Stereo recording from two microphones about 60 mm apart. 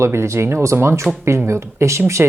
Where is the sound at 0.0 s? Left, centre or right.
Right.